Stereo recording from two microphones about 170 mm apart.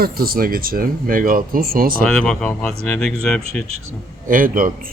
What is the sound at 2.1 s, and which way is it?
Speech, 5° left (ahead or behind).